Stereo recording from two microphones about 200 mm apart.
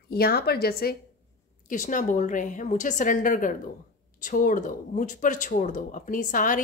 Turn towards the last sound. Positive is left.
turn(degrees=40)  # may be behind; listen again after turning